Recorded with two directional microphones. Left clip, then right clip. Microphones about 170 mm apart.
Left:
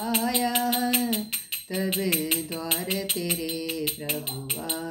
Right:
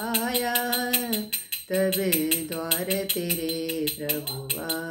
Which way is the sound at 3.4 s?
25° right (ahead or behind).